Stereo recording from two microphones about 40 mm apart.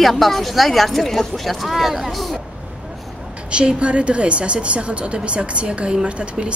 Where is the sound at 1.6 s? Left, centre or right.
Centre.